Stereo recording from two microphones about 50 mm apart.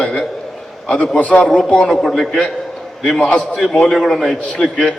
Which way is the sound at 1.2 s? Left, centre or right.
Left.